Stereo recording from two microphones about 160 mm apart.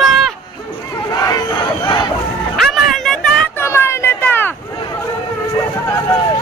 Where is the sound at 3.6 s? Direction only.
15° left (ahead or behind).